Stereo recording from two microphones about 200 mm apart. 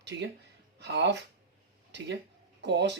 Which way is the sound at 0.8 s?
60° right (ahead or behind).